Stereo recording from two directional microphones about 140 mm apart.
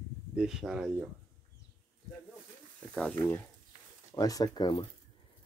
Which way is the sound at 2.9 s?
10° left (ahead or behind).